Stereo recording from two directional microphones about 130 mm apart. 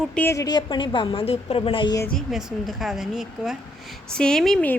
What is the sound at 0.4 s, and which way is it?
A woman's voice, 35° left (ahead or behind).